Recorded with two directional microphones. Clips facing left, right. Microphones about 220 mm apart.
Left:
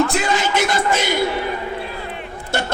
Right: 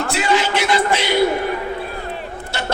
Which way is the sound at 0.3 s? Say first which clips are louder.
Right 1 dB; 45° left (ahead or behind).